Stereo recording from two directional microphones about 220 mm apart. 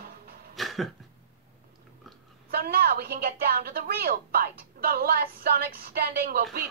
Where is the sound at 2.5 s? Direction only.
45° right (ahead or behind).